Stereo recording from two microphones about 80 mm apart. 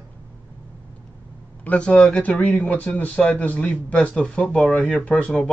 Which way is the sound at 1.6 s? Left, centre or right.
Centre.